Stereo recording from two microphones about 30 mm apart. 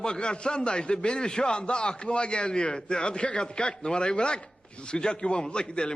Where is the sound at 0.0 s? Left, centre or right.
Left.